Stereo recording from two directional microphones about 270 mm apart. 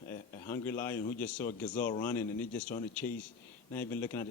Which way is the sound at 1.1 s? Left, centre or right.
Centre.